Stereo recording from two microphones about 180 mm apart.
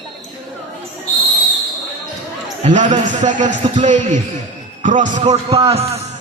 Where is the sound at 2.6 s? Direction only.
45° right (ahead or behind).